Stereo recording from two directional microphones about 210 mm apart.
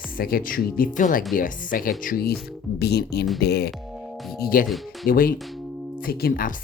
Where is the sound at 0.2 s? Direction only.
45° left (ahead or behind).